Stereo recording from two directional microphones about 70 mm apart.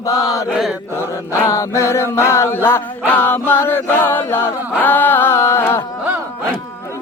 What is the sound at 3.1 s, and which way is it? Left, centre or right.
Chant, left.